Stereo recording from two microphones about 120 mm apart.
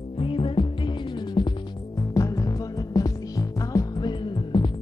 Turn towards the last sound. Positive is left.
turn(degrees=40)  # may be behind; listen again after turning